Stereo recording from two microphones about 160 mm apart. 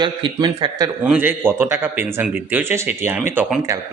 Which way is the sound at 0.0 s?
30° right (ahead or behind).